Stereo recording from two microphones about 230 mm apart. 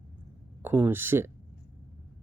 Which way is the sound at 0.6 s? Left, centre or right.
Centre.